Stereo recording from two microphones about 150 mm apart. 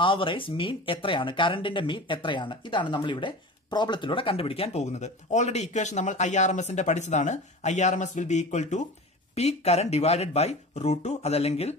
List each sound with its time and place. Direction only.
0.0 s speech: 35° left (ahead or behind)